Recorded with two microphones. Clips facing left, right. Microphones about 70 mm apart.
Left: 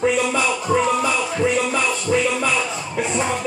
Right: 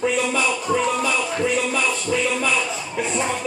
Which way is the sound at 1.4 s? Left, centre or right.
Centre.